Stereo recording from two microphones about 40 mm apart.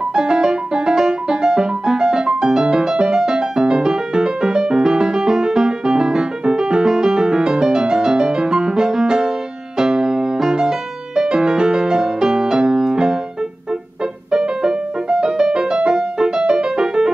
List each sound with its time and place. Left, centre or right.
0.1 s music: centre
14.3 s music: centre